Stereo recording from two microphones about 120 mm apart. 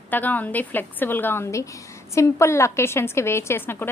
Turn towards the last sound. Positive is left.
turn(degrees=20)  # may be behind; listen again after turning